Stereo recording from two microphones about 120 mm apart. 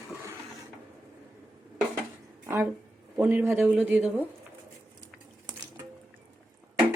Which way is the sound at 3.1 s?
20° right (ahead or behind).